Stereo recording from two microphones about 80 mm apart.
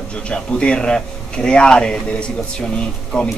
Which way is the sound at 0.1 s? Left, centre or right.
Centre.